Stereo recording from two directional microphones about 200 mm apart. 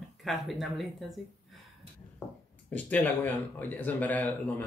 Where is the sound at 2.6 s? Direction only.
5° left (ahead or behind).